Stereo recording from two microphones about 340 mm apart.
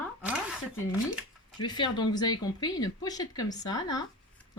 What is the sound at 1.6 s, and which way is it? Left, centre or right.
Speech, centre.